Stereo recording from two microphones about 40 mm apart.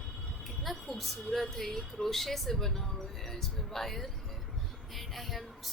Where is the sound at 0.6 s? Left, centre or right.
Centre.